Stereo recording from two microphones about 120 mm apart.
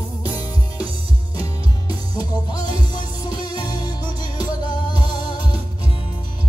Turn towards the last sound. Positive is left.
turn(degrees=35)  # may be behind; listen again after turning